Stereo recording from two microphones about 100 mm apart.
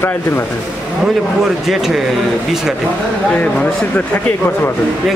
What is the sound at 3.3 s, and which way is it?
Speech, 10° left (ahead or behind).